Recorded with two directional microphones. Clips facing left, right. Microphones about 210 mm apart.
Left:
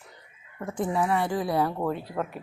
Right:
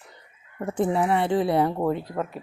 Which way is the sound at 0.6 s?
30° right (ahead or behind).